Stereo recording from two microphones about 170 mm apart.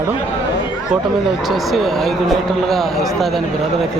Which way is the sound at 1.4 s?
Centre (ahead or behind).